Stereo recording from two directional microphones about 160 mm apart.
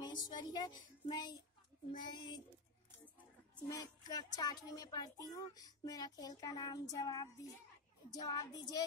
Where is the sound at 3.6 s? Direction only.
25° left (ahead or behind).